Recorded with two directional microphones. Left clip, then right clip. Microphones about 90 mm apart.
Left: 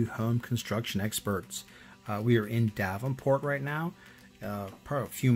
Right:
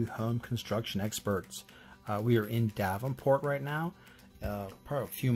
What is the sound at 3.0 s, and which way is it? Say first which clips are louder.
Speech: even; 20° right (ahead or behind).